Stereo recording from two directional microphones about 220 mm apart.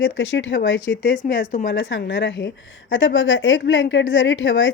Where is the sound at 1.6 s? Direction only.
55° left (ahead or behind).